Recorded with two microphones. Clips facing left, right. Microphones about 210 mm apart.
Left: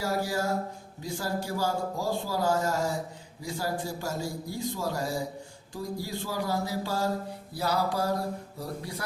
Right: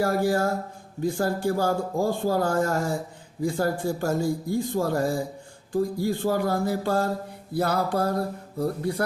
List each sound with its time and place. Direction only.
0.0 s speech: 55° right (ahead or behind)
5.7 s music: 55° right (ahead or behind)